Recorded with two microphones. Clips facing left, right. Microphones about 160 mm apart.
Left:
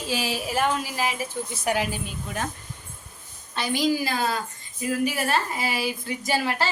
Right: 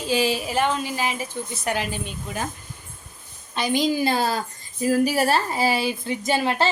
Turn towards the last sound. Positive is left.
turn(degrees=-25)  # may be behind; listen again after turning